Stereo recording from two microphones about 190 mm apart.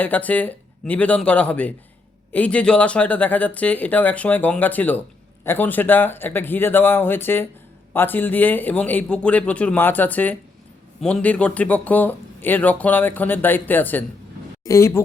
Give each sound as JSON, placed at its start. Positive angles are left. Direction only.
{"t": 0.0, "sound": "speech", "side_deg": 10}